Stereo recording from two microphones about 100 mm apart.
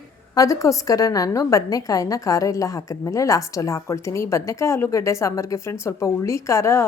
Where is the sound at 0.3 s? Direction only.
35° left (ahead or behind).